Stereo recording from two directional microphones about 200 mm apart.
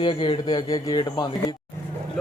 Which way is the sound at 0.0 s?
25° left (ahead or behind).